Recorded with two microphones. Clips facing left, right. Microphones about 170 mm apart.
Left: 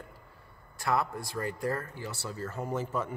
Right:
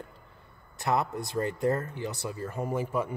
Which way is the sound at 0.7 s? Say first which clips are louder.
Right 2 dB; 20° right (ahead or behind).